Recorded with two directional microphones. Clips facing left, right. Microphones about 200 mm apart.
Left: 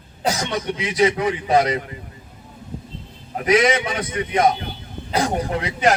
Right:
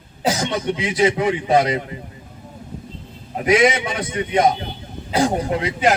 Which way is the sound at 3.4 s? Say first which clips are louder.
Right 1 dB; 30° right (ahead or behind).